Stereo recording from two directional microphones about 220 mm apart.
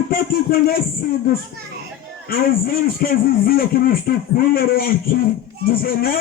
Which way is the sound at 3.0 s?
40° left (ahead or behind).